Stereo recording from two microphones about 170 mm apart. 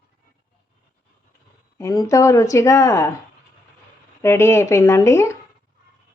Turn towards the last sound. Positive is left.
turn(degrees=15)  # may be behind; listen again after turning